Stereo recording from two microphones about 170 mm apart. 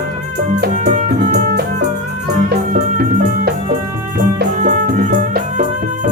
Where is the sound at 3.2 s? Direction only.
55° right (ahead or behind).